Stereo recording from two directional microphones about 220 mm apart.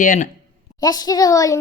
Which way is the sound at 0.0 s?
40° left (ahead or behind).